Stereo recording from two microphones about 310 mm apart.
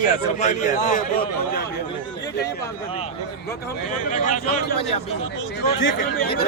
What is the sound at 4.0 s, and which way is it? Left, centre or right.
A man's voice, left.